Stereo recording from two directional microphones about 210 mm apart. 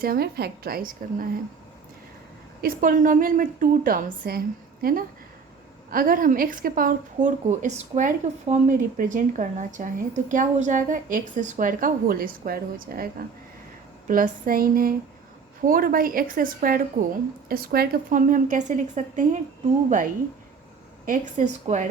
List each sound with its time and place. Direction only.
0.0 s a woman's voice: 45° right (ahead or behind)
2.6 s a woman's voice: 40° right (ahead or behind)
21.0 s speech: 40° right (ahead or behind)